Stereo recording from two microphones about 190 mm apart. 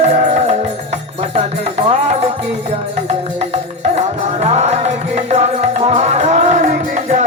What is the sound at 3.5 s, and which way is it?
Music, 35° right (ahead or behind).